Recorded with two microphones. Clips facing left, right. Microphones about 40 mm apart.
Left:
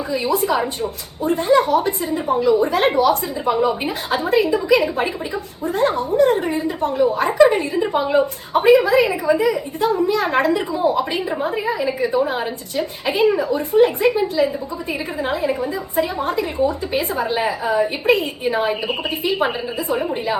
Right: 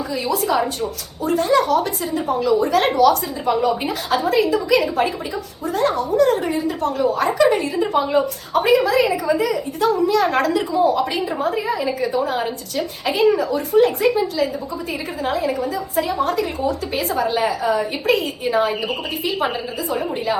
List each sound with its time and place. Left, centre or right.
0.1 s a woman's voice: left
8.7 s a woman's voice: left
15.2 s a woman's voice: left
18.9 s a woman's voice: left